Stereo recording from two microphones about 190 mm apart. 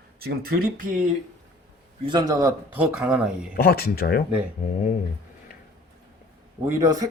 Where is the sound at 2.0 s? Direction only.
20° right (ahead or behind); by 3.5 s 5° right (ahead or behind).